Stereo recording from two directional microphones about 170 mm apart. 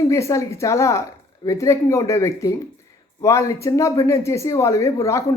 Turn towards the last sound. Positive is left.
turn(degrees=20)  # may be behind; listen again after turning